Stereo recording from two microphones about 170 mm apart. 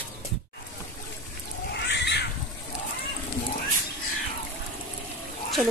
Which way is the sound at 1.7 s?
90° left.